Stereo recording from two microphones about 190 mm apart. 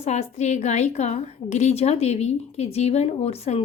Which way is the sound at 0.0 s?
35° left (ahead or behind).